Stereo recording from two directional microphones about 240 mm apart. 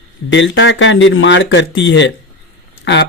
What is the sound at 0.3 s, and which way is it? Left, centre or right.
Speech, left.